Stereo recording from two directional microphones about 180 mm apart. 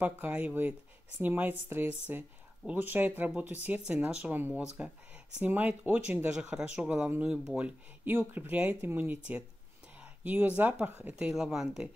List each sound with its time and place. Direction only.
0.0 s speech: 10° right (ahead or behind)
10.2 s speech: 10° right (ahead or behind)